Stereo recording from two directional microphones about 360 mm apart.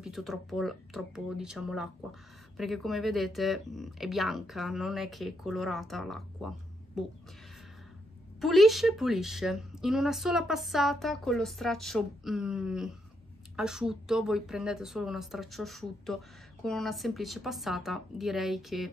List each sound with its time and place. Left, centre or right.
0.0 s speech: centre
8.4 s speech: centre